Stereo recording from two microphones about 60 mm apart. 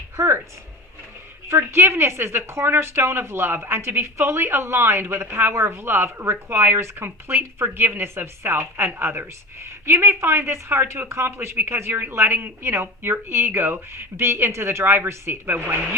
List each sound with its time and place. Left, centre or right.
0.2 s speech: right
1.5 s a woman's voice: right